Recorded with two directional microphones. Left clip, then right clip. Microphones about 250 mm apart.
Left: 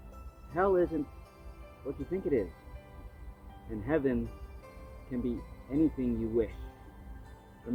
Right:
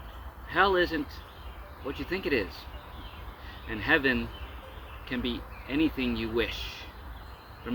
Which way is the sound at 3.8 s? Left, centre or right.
Centre.